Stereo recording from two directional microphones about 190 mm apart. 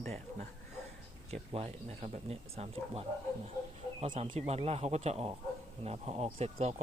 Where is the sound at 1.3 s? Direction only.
35° right (ahead or behind).